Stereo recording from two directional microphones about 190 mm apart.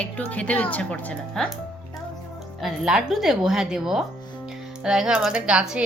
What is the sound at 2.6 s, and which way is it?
A woman's voice, centre (ahead or behind).